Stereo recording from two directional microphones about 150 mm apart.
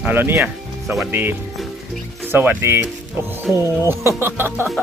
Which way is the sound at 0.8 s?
Centre (ahead or behind).